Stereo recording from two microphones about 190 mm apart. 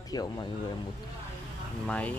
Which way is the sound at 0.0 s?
20° left (ahead or behind).